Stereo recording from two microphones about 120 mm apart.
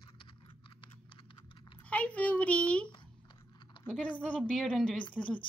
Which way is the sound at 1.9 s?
10° left (ahead or behind).